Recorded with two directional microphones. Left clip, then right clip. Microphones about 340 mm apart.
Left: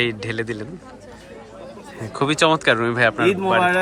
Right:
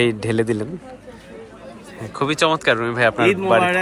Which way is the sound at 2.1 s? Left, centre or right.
Centre.